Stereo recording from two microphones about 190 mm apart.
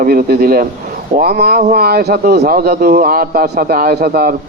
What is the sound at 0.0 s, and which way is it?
Speech, 50° right (ahead or behind).